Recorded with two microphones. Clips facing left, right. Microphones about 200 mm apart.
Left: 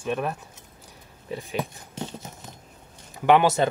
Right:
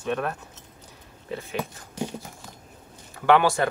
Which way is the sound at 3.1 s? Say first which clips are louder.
Left 1 dB; 20° left (ahead or behind).